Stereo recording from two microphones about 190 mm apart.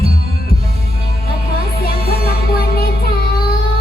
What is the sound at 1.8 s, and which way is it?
Music, 55° left (ahead or behind).